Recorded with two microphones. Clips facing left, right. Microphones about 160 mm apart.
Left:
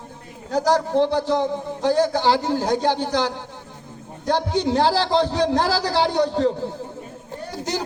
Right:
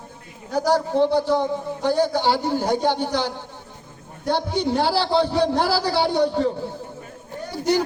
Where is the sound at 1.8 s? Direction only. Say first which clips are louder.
Left 2 dB; 90° left.